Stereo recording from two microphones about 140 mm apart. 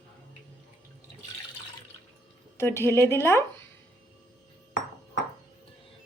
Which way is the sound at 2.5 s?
15° left (ahead or behind).